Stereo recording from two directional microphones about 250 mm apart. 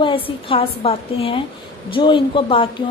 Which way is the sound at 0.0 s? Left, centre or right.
Left.